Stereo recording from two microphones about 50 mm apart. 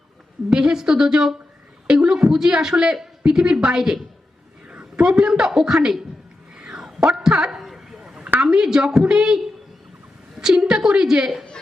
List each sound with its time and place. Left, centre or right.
0.5 s a woman's voice: centre
4.7 s a sound: right
5.0 s speech: centre
6.5 s whispering: centre
7.1 s a sound: centre
8.4 s speech: centre